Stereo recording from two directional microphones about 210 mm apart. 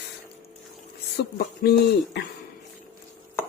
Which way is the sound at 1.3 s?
50° left (ahead or behind).